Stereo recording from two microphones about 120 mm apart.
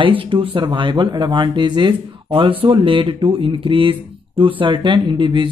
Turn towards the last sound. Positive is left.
turn(degrees=-40)  # may be behind; listen again after turning